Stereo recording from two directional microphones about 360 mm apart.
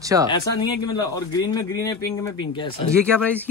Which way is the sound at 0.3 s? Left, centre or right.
Centre.